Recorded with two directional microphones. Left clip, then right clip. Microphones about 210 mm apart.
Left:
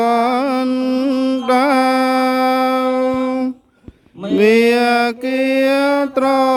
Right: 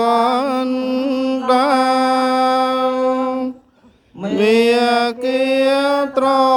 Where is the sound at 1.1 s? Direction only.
40° left (ahead or behind).